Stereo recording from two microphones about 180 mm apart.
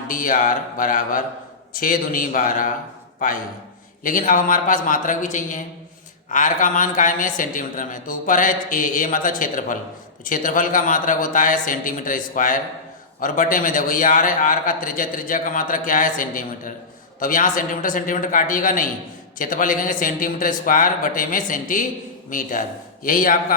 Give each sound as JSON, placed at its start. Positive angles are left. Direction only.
{"t": 0.1, "sound": "a man's voice", "side_deg": 50}
{"t": 4.0, "sound": "a man's voice", "side_deg": 50}